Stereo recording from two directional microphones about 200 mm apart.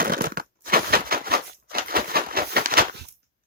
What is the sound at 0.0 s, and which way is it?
Crushing, 50° right (ahead or behind).